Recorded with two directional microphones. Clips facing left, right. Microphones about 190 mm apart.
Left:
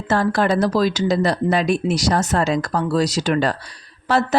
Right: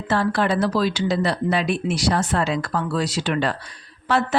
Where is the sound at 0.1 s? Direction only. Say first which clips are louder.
Left 3 dB; 45° left (ahead or behind).